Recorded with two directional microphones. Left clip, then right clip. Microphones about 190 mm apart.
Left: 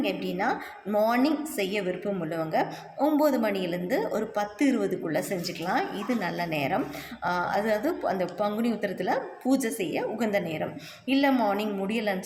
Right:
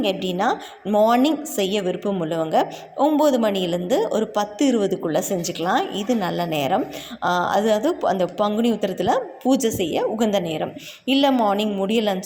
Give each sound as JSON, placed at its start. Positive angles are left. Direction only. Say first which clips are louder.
{"t": 0.0, "sound": "a woman's voice", "louder": "right 7 dB", "side_deg": -35}